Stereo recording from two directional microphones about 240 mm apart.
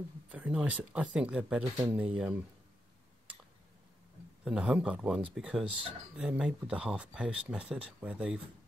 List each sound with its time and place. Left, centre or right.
0.3 s speech: centre
4.5 s speech: centre